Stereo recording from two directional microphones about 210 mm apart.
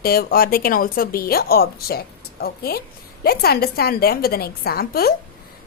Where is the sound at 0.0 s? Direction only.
45° left (ahead or behind).